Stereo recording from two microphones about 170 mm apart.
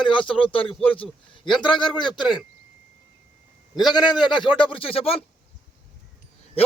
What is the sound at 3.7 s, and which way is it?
Speech, 25° left (ahead or behind).